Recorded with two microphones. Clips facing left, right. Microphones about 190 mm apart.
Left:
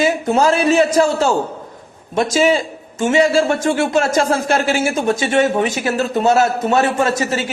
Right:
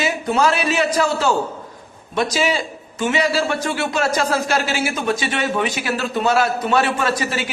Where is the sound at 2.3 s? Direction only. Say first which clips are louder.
Left 6 dB; 50° left (ahead or behind).